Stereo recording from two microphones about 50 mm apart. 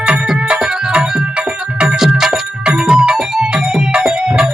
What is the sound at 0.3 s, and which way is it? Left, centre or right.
Music, centre.